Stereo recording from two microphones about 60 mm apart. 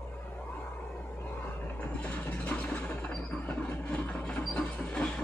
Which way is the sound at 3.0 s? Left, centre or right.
Centre.